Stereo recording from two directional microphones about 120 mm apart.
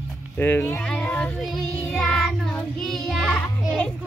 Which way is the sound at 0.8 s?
10° left (ahead or behind).